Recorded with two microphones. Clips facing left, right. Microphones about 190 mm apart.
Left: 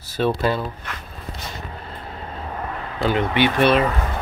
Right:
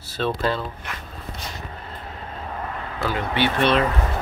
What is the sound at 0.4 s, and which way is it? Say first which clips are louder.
Speech: left 2 dB; 10° left (ahead or behind).